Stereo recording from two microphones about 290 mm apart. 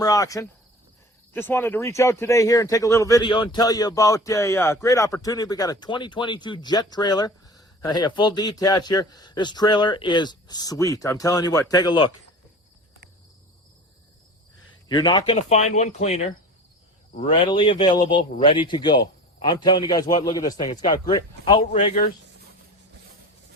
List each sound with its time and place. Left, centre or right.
0.0 s speech: centre
14.8 s speech: centre